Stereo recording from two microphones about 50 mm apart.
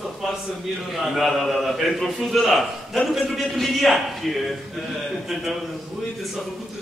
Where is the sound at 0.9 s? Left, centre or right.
Centre.